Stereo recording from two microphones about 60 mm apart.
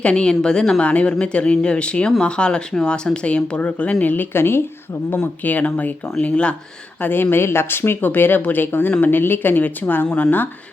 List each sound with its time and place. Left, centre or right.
0.0 s a woman's voice: centre; by 4.6 s left
5.1 s speech: left
7.0 s speech: left
10.1 s a woman's voice: centre